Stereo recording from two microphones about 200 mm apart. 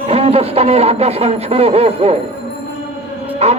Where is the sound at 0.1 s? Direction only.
30° right (ahead or behind).